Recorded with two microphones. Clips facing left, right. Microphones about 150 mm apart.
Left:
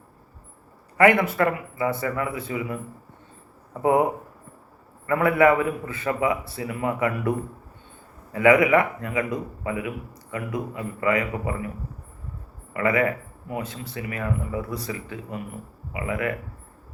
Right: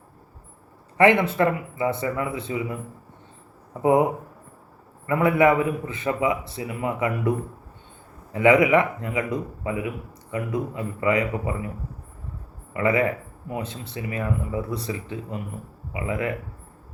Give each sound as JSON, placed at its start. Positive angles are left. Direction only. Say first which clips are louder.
{"t": 0.9, "sound": "a man's voice", "louder": "even", "side_deg": -25}
{"t": 5.0, "sound": "a man's voice", "louder": "even", "side_deg": -20}
{"t": 12.7, "sound": "a man's voice", "louder": "right 1 dB", "side_deg": -25}